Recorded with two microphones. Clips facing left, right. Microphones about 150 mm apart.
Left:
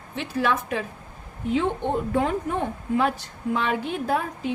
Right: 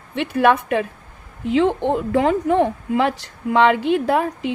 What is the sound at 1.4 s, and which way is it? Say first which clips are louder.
A woman's voice: right 6 dB; 90° right.